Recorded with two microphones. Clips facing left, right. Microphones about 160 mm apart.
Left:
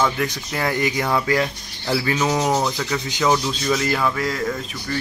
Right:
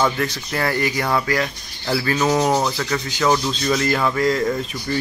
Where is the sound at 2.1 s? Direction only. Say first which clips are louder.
Right 4 dB; 5° left (ahead or behind).